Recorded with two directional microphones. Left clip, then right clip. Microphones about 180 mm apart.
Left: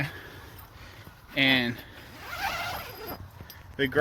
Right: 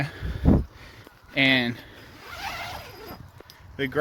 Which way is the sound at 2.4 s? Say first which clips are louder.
Left 2 dB; centre (ahead or behind).